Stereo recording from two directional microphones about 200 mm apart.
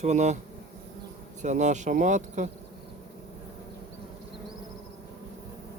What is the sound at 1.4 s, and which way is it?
Speech, 35° right (ahead or behind).